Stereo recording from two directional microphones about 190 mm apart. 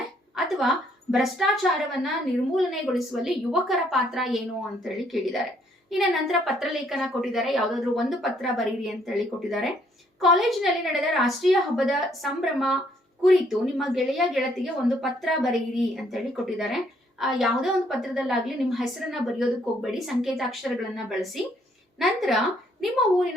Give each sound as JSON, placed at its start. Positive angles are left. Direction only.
{"t": 0.3, "sound": "a woman's voice", "side_deg": 0}